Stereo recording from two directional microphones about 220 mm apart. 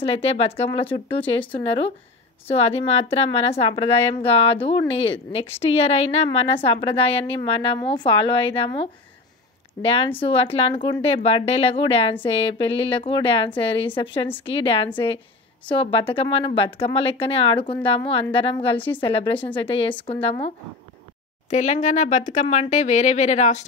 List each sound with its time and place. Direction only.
0.0 s a woman's voice: 25° left (ahead or behind)